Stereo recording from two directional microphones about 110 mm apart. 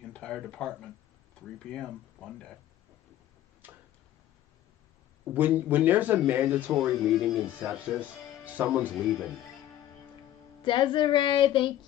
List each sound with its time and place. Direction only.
0.1 s speech: 10° left (ahead or behind)
3.6 s tick-tock: 15° right (ahead or behind)
5.3 s speech: 15° right (ahead or behind)
10.6 s a sound: 50° left (ahead or behind)